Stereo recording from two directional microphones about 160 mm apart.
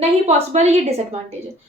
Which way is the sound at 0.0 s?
40° right (ahead or behind).